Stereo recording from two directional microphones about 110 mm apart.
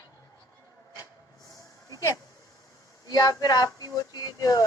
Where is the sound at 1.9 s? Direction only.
30° left (ahead or behind).